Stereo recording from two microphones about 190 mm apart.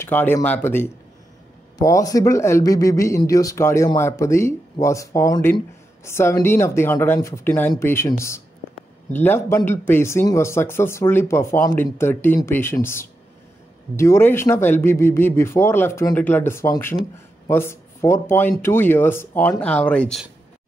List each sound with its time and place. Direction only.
0.0 s speech: 10° left (ahead or behind)